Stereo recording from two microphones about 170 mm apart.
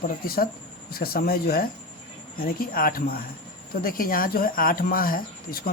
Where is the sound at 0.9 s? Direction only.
65° left (ahead or behind).